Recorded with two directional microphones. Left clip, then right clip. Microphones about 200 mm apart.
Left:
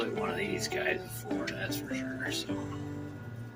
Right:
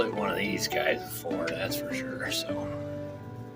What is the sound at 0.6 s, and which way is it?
Speech, 60° right (ahead or behind).